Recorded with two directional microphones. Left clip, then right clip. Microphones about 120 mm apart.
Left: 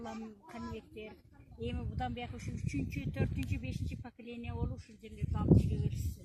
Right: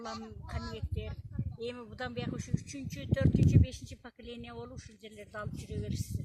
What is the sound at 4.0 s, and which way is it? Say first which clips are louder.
Speech: right 1 dB; 25° right (ahead or behind).